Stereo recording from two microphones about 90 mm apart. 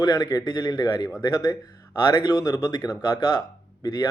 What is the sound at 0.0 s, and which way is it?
Speech, 45° left (ahead or behind).